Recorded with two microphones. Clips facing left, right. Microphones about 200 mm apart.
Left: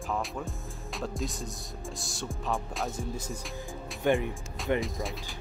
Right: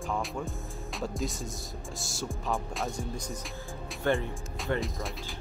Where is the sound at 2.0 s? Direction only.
Centre (ahead or behind).